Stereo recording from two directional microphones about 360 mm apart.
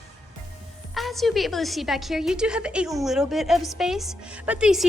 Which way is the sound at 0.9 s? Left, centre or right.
Centre.